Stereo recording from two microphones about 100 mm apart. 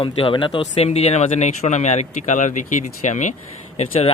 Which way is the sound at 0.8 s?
90° left.